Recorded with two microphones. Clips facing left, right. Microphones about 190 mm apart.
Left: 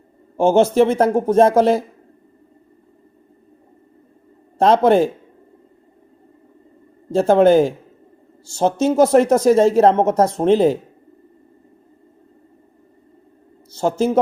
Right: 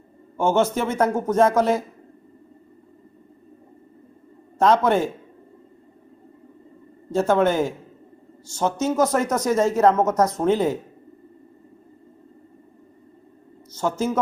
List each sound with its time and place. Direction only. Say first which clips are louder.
0.3 s speech: left 7 dB; 30° left (ahead or behind)
4.5 s speech: left 5 dB; 30° left (ahead or behind)
7.1 s speech: left 7 dB; 30° left (ahead or behind)
13.7 s speech: left 5 dB; 30° left (ahead or behind)